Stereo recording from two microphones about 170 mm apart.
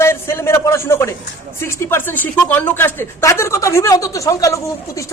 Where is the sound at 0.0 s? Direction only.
15° left (ahead or behind).